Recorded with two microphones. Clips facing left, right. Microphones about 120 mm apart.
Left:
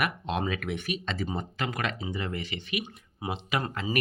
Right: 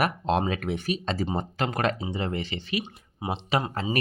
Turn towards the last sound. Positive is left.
turn(degrees=-25)  # may be behind; listen again after turning